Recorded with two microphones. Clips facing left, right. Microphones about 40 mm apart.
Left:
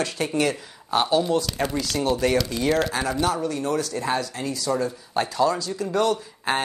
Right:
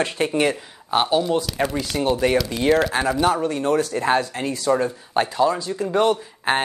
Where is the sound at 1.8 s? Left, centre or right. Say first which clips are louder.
Right 2 dB; right.